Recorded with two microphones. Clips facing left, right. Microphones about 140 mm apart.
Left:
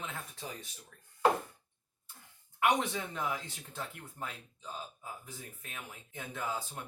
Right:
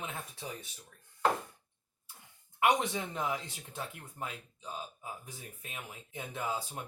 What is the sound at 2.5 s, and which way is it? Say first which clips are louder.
Speech: right 1 dB; 15° right (ahead or behind).